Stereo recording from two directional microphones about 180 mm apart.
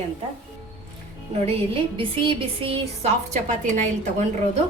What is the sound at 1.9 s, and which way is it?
Speech, 30° right (ahead or behind).